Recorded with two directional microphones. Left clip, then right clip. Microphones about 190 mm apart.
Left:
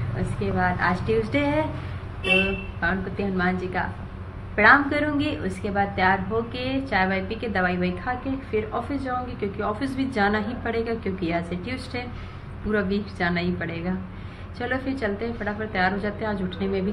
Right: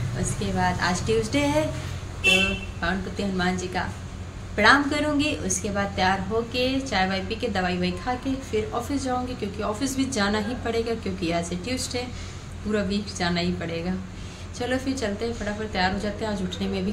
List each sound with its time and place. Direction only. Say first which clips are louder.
0.4 s a woman's voice: left 1 dB; 25° right (ahead or behind)
2.8 s a woman's voice: left 3 dB; 25° right (ahead or behind)